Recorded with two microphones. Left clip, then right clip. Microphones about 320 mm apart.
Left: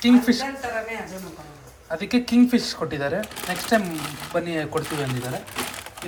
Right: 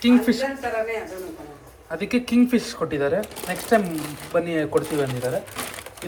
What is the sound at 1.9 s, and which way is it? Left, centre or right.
Speech, centre.